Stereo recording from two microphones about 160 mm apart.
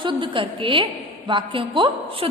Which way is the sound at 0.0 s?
30° right (ahead or behind).